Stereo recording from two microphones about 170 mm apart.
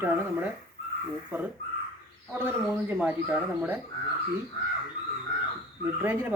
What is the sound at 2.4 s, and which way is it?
Speech, 10° right (ahead or behind).